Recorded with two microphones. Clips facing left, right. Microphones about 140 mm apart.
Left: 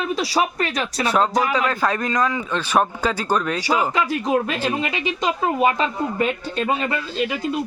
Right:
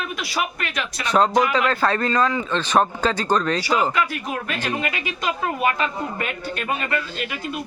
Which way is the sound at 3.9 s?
30° left (ahead or behind).